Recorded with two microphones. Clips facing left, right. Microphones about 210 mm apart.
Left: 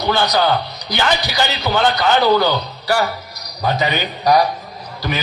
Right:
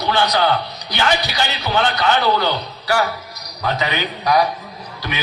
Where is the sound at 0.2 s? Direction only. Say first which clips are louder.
Right 2 dB; 40° left (ahead or behind).